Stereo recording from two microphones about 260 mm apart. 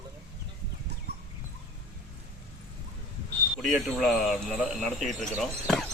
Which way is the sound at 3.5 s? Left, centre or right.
Centre.